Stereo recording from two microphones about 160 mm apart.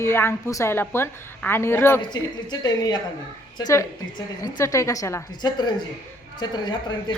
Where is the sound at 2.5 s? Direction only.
25° left (ahead or behind).